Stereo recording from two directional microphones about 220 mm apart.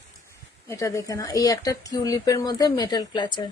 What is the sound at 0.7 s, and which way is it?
A woman's voice, 15° left (ahead or behind).